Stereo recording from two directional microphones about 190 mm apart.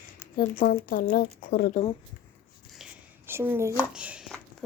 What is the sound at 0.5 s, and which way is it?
Speech, 45° left (ahead or behind).